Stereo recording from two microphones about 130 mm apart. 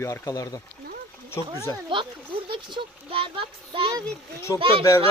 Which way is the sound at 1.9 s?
40° right (ahead or behind).